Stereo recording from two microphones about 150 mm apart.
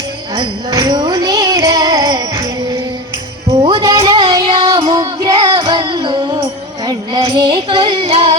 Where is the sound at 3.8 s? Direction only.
25° right (ahead or behind).